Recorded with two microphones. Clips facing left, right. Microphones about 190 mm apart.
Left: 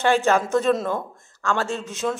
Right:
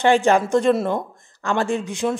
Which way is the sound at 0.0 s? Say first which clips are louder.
Right 3 dB; 15° right (ahead or behind).